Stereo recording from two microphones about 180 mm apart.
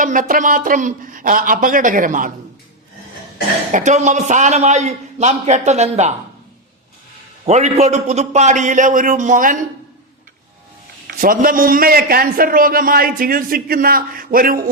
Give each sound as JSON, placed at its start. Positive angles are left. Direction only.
{"t": 0.0, "sound": "a man's voice", "side_deg": -45}
{"t": 3.7, "sound": "a man's voice", "side_deg": -45}
{"t": 7.4, "sound": "a man's voice", "side_deg": -35}
{"t": 11.0, "sound": "a man's voice", "side_deg": -50}